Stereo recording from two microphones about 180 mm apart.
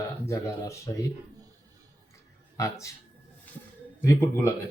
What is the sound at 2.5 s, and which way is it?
Speech, 15° left (ahead or behind).